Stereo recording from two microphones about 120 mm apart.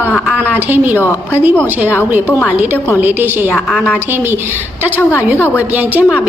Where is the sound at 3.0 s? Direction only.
15° right (ahead or behind).